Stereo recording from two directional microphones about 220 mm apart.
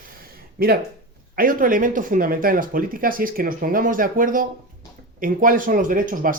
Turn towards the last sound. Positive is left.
turn(degrees=-40)  # may be behind; listen again after turning